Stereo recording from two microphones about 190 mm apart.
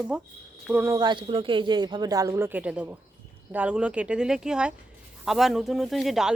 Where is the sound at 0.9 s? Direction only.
25° right (ahead or behind).